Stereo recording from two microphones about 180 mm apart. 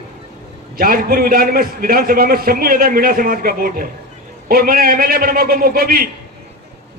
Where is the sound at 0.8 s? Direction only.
55° right (ahead or behind).